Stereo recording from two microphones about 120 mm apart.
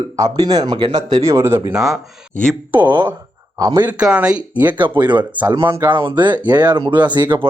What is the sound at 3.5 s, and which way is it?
Speech, 30° right (ahead or behind).